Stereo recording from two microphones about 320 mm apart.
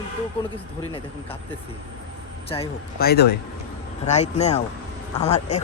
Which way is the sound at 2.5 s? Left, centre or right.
Centre.